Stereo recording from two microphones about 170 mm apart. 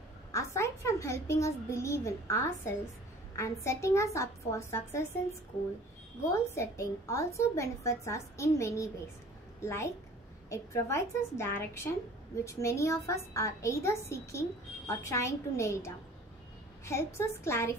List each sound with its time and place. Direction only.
0.3 s a child's voice: 15° left (ahead or behind)
6.3 s a woman's voice: 15° left (ahead or behind)